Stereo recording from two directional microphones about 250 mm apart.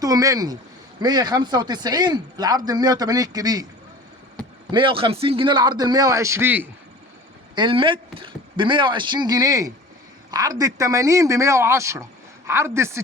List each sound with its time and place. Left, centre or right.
0.0 s speech: centre
4.7 s speech: centre
7.5 s speech: centre